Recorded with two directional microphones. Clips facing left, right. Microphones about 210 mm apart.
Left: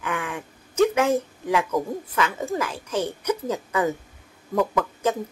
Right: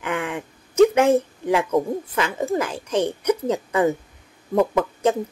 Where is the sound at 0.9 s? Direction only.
25° right (ahead or behind).